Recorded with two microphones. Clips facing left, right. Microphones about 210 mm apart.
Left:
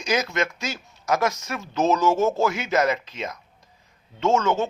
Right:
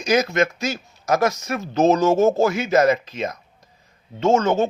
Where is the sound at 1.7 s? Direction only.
55° right (ahead or behind).